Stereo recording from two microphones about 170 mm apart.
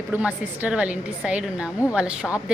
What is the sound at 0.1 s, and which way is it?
A woman's voice, 10° right (ahead or behind).